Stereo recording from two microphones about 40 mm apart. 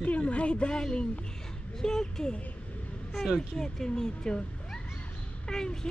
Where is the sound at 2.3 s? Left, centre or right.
Left.